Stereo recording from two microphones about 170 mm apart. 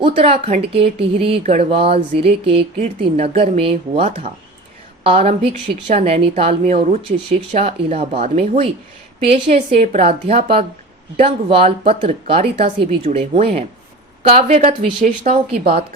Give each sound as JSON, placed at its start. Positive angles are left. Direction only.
{"t": 0.0, "sound": "speech", "side_deg": -35}
{"t": 0.8, "sound": "speech", "side_deg": -80}
{"t": 1.2, "sound": "speech", "side_deg": -35}